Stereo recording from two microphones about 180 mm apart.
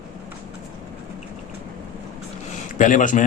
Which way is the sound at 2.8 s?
45° left (ahead or behind).